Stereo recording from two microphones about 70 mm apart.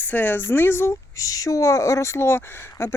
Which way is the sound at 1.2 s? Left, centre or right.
Left.